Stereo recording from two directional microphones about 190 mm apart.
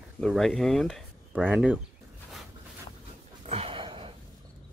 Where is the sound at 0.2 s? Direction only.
Centre (ahead or behind).